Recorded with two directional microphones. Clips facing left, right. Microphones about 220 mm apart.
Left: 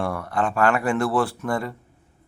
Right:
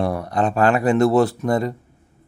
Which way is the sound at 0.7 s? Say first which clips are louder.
Right 4 dB; 35° right (ahead or behind).